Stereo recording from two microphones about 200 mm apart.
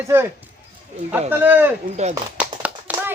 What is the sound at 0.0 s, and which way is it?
Speech, 15° right (ahead or behind).